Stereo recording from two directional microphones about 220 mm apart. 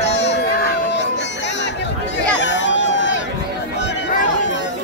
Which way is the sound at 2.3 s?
55° left (ahead or behind).